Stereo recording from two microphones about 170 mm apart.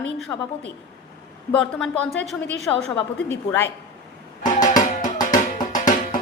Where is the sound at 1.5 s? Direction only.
5° left (ahead or behind).